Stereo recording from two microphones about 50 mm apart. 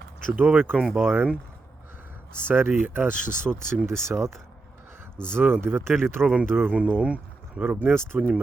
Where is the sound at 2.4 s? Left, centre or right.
Right.